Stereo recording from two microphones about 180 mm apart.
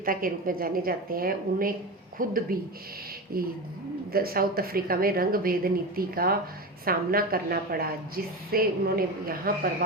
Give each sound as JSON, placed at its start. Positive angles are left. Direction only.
{"t": 0.0, "sound": "a woman's voice", "side_deg": -50}